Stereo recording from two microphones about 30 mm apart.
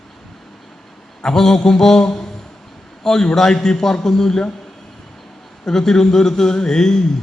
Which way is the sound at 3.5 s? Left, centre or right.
Left.